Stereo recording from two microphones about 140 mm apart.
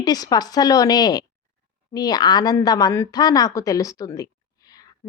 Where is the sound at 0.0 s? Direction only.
25° left (ahead or behind).